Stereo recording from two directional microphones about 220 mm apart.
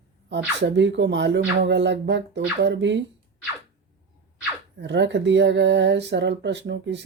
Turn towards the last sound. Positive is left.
turn(degrees=-55)  # may be behind; listen again after turning